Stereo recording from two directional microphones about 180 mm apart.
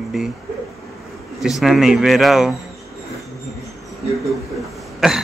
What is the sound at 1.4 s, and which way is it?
Speech, centre (ahead or behind).